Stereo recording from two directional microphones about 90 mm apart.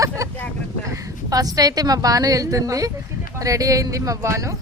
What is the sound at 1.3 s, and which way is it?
Speech, 45° right (ahead or behind).